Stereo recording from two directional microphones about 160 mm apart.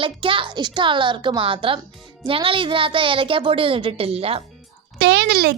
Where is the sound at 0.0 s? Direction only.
30° right (ahead or behind).